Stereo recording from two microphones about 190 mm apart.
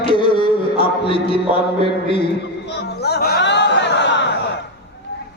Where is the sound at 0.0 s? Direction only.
25° left (ahead or behind).